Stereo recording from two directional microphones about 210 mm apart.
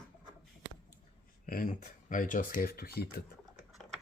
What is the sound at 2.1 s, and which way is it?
Speech, 40° left (ahead or behind).